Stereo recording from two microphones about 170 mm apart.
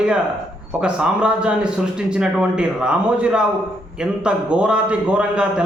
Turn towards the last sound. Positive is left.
turn(degrees=-5)  # may be behind; listen again after turning